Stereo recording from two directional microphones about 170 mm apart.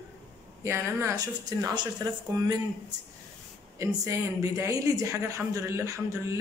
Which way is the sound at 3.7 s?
15° right (ahead or behind).